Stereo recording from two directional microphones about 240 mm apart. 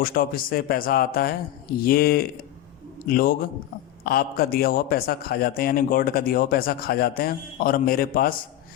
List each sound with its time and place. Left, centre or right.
0.0 s a man's voice: left